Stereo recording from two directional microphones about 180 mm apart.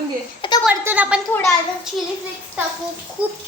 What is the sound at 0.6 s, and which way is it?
Speech, 10° right (ahead or behind).